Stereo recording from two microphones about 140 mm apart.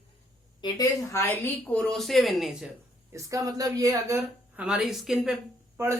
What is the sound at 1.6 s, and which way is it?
Speech, 5° left (ahead or behind).